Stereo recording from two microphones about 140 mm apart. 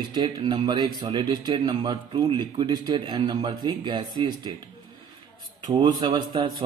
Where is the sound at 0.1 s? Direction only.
35° right (ahead or behind).